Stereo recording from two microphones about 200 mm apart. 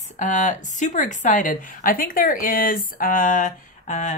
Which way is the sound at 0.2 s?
40° left (ahead or behind).